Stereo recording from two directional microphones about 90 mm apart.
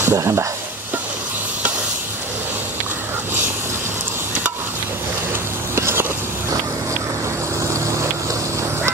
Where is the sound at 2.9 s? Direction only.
25° right (ahead or behind).